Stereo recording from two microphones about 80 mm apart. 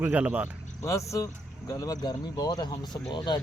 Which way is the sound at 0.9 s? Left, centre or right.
Left.